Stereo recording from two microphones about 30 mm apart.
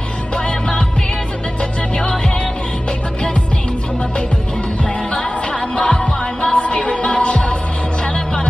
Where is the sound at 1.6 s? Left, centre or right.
Left.